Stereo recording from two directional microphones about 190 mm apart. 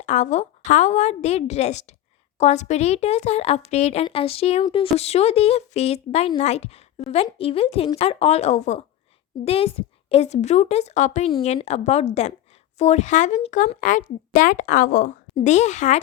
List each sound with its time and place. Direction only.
0.0 s speech: 40° left (ahead or behind)
15.4 s speech: 40° left (ahead or behind)